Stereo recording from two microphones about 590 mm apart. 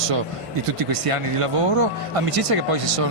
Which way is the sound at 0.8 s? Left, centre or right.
Right.